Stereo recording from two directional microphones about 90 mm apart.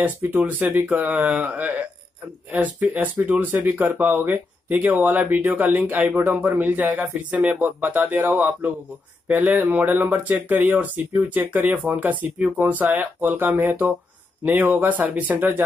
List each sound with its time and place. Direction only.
0.0 s speech: 20° right (ahead or behind)